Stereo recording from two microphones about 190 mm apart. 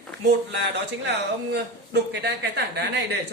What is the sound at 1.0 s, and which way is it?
A woman's voice, 65° right (ahead or behind).